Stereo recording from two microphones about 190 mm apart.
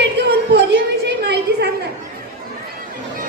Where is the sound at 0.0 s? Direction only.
65° right (ahead or behind).